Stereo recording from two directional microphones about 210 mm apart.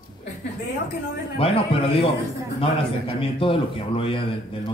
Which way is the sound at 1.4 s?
25° left (ahead or behind).